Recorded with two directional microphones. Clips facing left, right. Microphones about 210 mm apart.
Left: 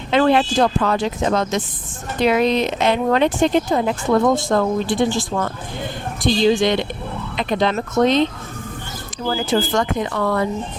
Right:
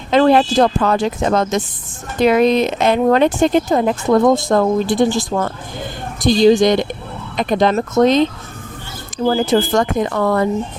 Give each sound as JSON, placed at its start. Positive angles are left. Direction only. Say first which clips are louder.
{"t": 0.1, "sound": "speech", "louder": "right 4 dB", "side_deg": -40}